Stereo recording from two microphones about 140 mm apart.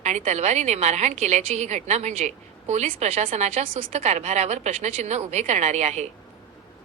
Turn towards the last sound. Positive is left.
turn(degrees=-55)  # may be behind; listen again after turning